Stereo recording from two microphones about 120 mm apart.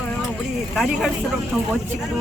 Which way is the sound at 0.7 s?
Centre (ahead or behind).